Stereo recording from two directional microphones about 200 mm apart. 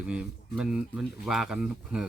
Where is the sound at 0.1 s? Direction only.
5° right (ahead or behind).